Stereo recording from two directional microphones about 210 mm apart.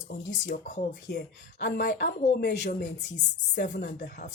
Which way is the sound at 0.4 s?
40° left (ahead or behind).